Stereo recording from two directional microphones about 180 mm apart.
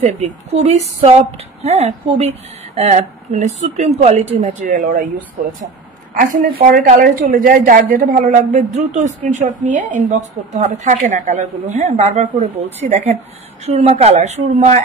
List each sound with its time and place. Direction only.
0.0 s a woman's voice: 40° right (ahead or behind)
6.1 s a woman's voice: 45° right (ahead or behind)